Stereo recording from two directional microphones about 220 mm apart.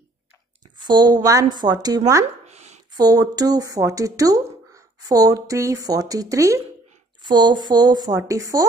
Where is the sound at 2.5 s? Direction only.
30° right (ahead or behind).